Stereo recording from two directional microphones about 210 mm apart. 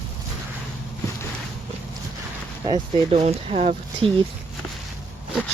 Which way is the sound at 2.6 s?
25° right (ahead or behind).